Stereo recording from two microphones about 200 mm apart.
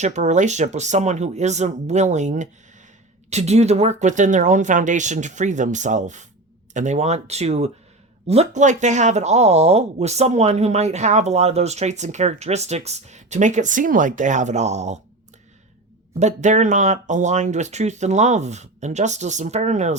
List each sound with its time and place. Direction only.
0.0 s speech: 35° right (ahead or behind)
16.1 s speech: 35° right (ahead or behind)